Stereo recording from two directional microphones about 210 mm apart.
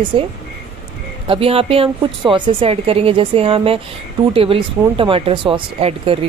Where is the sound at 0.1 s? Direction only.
25° right (ahead or behind).